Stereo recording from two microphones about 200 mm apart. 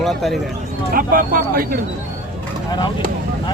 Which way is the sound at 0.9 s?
45° right (ahead or behind).